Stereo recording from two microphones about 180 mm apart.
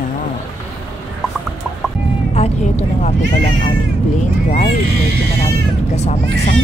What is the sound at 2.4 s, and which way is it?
Vehicle, 35° left (ahead or behind).